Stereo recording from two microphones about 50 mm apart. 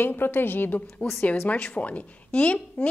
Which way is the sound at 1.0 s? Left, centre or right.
Left.